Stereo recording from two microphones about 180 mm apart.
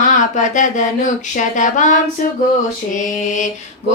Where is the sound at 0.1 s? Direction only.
45° left (ahead or behind).